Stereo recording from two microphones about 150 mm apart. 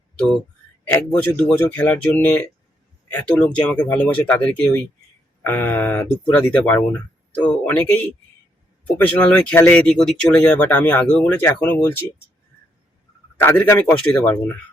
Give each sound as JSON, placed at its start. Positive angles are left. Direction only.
{"t": 0.9, "sound": "speech", "side_deg": 15}
{"t": 9.0, "sound": "speech", "side_deg": 10}
{"t": 13.4, "sound": "speech", "side_deg": 15}